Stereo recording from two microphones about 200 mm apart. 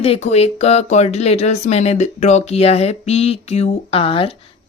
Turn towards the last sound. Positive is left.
turn(degrees=30)  # may be behind; listen again after turning